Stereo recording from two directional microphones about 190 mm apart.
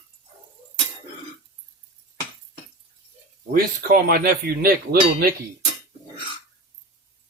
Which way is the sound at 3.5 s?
50° right (ahead or behind).